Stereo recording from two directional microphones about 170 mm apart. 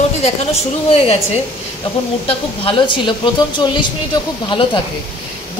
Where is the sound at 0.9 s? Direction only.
35° left (ahead or behind).